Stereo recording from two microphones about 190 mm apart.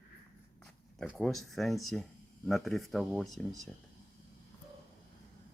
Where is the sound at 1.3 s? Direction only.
Centre (ahead or behind).